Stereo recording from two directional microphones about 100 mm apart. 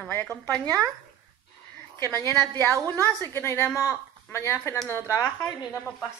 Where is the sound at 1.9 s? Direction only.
25° left (ahead or behind).